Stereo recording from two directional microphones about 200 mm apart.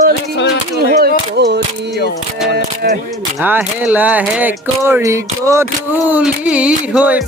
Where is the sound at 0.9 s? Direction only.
55° right (ahead or behind).